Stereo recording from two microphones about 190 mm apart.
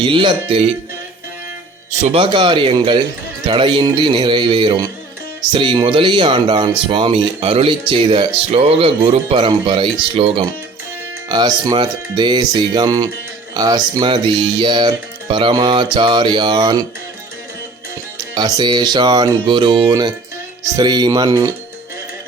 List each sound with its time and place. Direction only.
0.0 s speech: 25° right (ahead or behind)
2.0 s speech: 25° right (ahead or behind)
18.3 s speech: 20° right (ahead or behind)